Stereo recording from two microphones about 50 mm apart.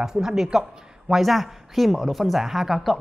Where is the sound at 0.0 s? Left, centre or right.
Centre.